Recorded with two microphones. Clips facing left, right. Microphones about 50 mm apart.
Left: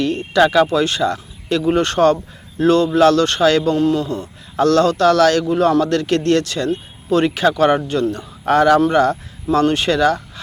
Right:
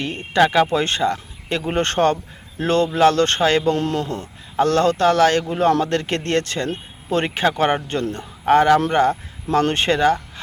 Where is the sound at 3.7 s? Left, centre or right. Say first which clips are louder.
Left 4 dB; right.